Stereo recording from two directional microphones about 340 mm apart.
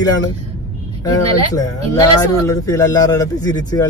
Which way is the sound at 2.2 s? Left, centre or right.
Centre.